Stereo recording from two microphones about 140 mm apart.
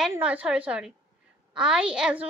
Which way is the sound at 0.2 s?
10° right (ahead or behind).